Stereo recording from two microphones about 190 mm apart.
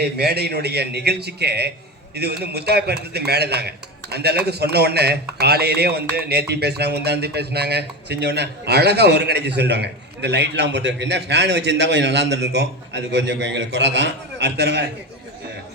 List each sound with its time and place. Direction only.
0.0 s speech: 60° right (ahead or behind)